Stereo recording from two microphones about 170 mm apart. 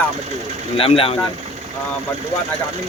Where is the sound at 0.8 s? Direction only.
35° left (ahead or behind).